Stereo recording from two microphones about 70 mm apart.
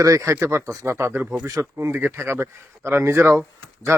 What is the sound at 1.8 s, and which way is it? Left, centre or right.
A man's voice, right.